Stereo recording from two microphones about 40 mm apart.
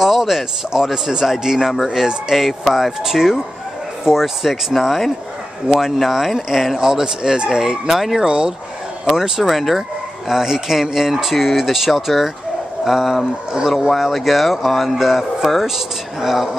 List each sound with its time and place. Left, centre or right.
0.0 s speech: centre
6.0 s speech: centre
8.2 s speech: right; by 9.8 s centre
10.2 s speech: centre
13.7 s speech: centre